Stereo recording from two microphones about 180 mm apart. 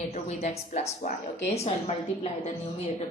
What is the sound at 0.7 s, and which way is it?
A woman's voice, 40° left (ahead or behind).